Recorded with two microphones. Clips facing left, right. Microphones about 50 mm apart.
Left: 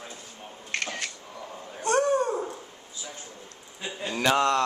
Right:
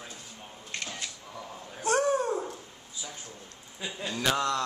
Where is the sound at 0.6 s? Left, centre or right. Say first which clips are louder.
Left 6 dB; left.